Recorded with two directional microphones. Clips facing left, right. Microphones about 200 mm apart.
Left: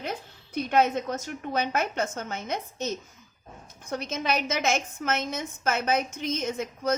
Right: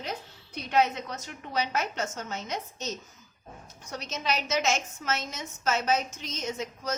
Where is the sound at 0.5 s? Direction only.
50° left (ahead or behind).